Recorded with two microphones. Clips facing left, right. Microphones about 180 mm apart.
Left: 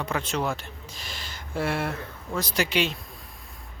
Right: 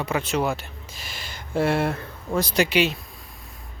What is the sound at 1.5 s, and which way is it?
Speech, 25° right (ahead or behind).